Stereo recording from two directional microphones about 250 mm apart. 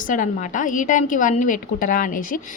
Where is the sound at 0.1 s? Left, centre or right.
Left.